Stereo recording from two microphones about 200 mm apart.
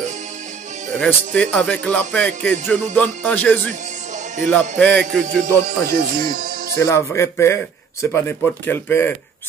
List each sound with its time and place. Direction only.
0.9 s speech: 5° left (ahead or behind)
5.4 s speech: 45° right (ahead or behind)
6.8 s speech: 15° left (ahead or behind)